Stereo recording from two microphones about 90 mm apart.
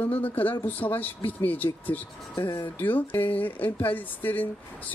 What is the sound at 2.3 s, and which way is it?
Speech, 35° left (ahead or behind).